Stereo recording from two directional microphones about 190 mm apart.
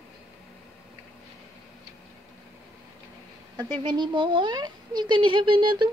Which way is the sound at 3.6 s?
25° right (ahead or behind).